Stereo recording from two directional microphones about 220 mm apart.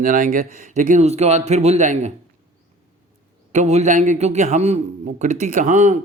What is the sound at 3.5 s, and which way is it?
A man's voice, 30° right (ahead or behind).